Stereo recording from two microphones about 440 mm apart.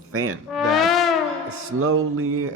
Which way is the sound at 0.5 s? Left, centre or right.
Centre.